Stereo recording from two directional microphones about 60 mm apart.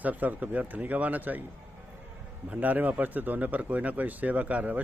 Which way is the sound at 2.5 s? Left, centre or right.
Right.